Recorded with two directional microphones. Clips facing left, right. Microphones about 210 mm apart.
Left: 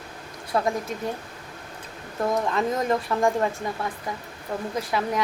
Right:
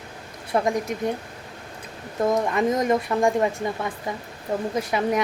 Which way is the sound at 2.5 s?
15° right (ahead or behind).